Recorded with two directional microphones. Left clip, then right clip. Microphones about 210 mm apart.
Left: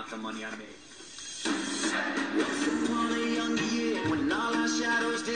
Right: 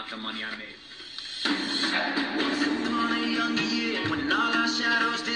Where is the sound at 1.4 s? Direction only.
30° right (ahead or behind).